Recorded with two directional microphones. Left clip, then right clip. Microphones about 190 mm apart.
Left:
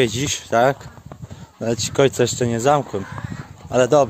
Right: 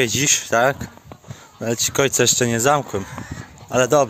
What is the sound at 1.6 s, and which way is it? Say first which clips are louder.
Speech: right 1 dB; 25° left (ahead or behind).